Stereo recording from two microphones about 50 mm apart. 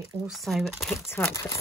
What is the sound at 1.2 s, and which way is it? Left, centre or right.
Speech, left.